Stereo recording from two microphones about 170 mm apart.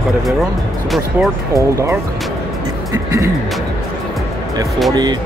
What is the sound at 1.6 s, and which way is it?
Speech, 15° right (ahead or behind).